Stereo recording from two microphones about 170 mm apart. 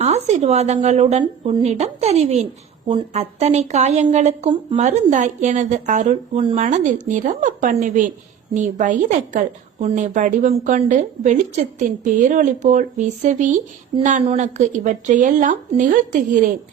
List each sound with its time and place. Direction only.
0.0 s a woman's voice: 40° right (ahead or behind)
6.4 s speech: 35° right (ahead or behind)
6.7 s a woman's voice: 45° right (ahead or behind)